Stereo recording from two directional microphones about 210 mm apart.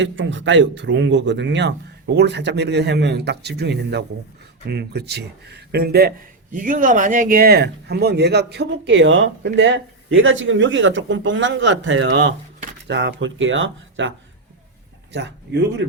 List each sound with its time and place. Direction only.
0.0 s speech: 65° right (ahead or behind)
15.1 s a man's voice: 55° right (ahead or behind)